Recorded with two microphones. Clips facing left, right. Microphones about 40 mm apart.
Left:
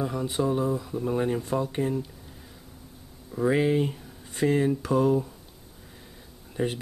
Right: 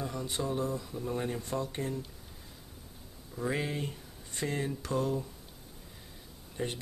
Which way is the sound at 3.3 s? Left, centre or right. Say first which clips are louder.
Left 11 dB; centre.